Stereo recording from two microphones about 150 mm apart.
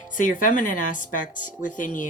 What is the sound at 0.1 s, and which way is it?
Speech, 60° left (ahead or behind).